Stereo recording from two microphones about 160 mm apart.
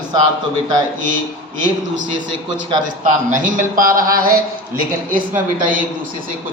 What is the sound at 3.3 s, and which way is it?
A man's voice, 55° right (ahead or behind).